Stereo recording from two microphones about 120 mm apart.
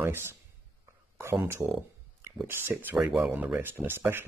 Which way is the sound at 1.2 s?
20° right (ahead or behind).